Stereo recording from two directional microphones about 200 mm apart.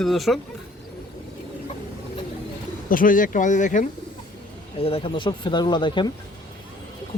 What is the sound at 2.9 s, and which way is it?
Speech, 45° left (ahead or behind).